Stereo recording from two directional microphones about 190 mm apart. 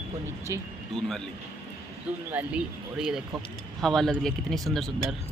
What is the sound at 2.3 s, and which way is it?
Speech, 5° right (ahead or behind).